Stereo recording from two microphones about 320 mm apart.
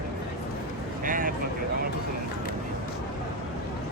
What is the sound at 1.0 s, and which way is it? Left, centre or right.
Speech, right.